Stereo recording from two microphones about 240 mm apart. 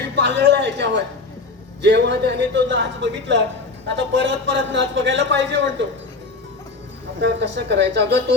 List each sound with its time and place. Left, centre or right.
0.2 s a man's voice: right
7.2 s a man's voice: right